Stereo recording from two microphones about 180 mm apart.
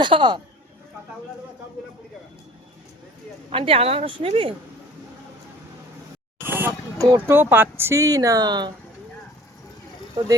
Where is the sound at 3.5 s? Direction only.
30° right (ahead or behind).